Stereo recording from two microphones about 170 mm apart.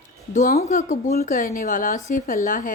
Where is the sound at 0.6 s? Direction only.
40° left (ahead or behind).